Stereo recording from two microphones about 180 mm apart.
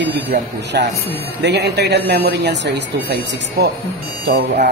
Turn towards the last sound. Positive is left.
turn(degrees=-65)  # may be behind; listen again after turning